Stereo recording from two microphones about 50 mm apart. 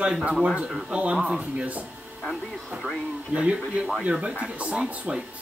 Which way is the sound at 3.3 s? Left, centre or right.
Right.